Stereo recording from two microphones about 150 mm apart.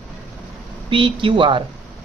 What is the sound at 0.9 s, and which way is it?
Speech, 35° right (ahead or behind).